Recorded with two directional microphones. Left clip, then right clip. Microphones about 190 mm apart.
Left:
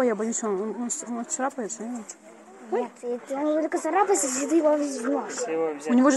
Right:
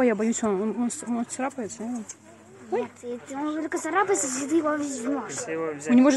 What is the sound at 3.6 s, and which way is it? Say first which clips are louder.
Speech: right 2 dB; 20° right (ahead or behind).